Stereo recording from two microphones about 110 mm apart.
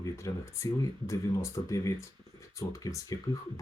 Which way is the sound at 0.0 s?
30° left (ahead or behind).